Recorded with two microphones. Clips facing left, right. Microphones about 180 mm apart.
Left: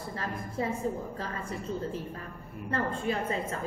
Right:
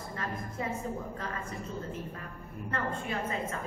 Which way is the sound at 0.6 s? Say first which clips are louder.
Left 4 dB; 30° left (ahead or behind).